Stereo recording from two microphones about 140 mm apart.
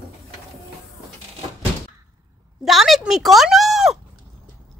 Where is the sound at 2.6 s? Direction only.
Centre (ahead or behind).